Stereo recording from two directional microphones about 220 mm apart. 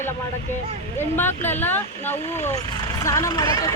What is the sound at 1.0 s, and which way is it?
Speech, 10° left (ahead or behind).